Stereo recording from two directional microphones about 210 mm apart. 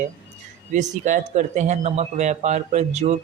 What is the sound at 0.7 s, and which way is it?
Speech, 35° right (ahead or behind).